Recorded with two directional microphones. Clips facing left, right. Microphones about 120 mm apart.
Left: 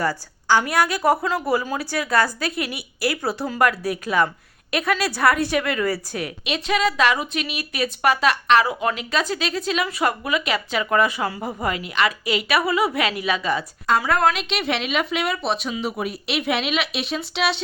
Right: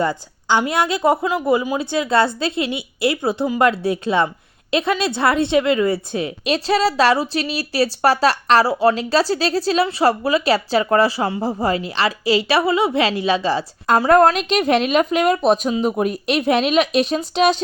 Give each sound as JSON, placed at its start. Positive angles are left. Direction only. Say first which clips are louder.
{"t": 0.0, "sound": "a woman's voice", "louder": "right 3 dB", "side_deg": -20}
{"t": 6.4, "sound": "a woman's voice", "louder": "right 4 dB", "side_deg": -35}
{"t": 13.8, "sound": "a woman's voice", "louder": "right 7 dB", "side_deg": -45}